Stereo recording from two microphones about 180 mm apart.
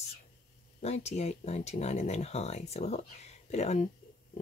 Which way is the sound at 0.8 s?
35° left (ahead or behind).